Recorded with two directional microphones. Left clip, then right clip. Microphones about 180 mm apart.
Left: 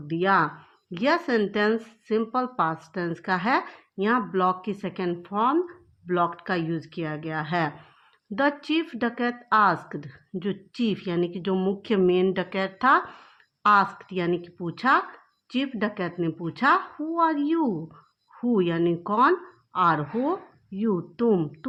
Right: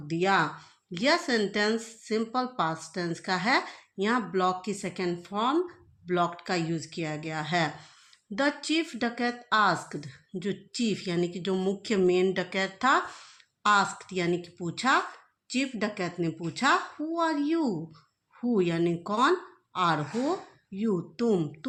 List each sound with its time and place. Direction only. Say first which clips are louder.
0.1 s speech: left 3 dB; 40° left (ahead or behind)